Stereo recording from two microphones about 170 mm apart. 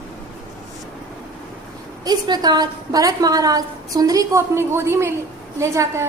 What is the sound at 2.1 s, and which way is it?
A woman's voice, 25° right (ahead or behind).